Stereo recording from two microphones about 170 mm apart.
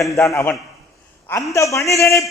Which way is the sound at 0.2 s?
15° left (ahead or behind).